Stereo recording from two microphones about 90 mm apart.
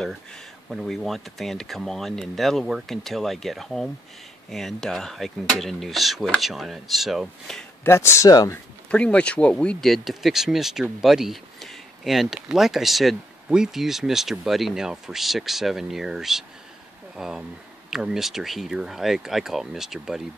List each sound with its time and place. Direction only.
0.7 s speech: centre (ahead or behind)
7.8 s speech: 30° left (ahead or behind)
8.3 s speech: 40° left (ahead or behind)
8.9 s speech: 10° left (ahead or behind)
9.8 s speech: centre (ahead or behind)